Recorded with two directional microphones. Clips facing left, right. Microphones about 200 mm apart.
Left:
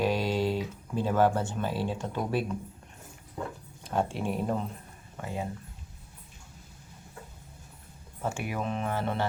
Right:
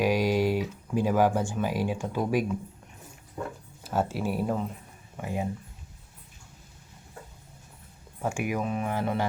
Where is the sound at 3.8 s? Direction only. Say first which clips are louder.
Right 1 dB; 5° right (ahead or behind).